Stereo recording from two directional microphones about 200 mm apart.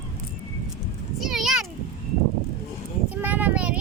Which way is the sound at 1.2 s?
Centre (ahead or behind).